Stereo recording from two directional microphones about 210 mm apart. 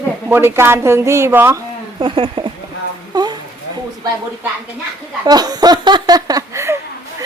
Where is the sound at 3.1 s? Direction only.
20° right (ahead or behind).